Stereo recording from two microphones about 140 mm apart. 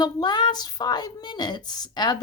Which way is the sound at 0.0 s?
30° left (ahead or behind).